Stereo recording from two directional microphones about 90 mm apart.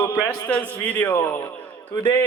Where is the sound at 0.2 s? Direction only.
15° left (ahead or behind).